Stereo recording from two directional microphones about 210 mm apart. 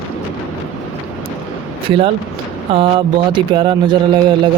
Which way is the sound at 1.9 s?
25° right (ahead or behind).